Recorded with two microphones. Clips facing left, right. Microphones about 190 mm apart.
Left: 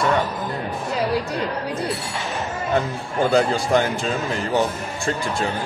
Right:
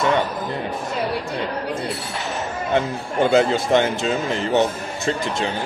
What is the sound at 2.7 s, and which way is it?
Speech, 25° right (ahead or behind).